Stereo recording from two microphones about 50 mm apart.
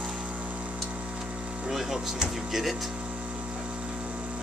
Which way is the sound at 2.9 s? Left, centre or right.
Right.